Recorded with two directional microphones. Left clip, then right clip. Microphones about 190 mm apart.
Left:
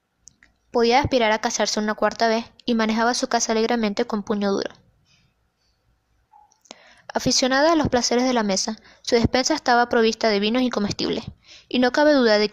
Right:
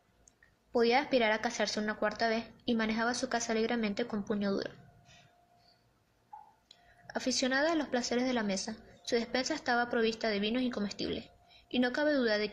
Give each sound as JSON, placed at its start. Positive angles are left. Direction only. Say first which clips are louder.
{"t": 0.7, "sound": "speech", "louder": "left 10 dB", "side_deg": 45}
{"t": 6.7, "sound": "speech", "louder": "left 16 dB", "side_deg": 45}